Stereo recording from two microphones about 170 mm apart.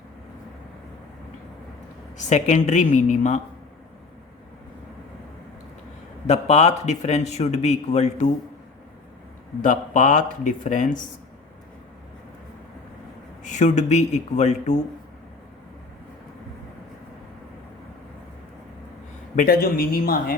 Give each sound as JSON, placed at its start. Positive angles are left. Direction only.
{"t": 2.1, "sound": "a man's voice", "side_deg": 45}
{"t": 6.2, "sound": "a man's voice", "side_deg": 40}
{"t": 9.6, "sound": "a man's voice", "side_deg": 50}
{"t": 13.4, "sound": "a man's voice", "side_deg": 45}
{"t": 19.4, "sound": "speech", "side_deg": 60}